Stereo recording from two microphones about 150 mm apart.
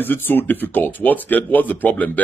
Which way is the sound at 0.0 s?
15° left (ahead or behind).